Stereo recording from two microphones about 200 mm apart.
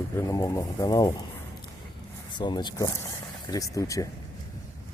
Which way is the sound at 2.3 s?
20° left (ahead or behind).